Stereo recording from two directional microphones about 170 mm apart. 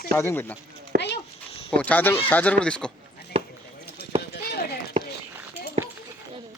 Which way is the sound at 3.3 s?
35° right (ahead or behind).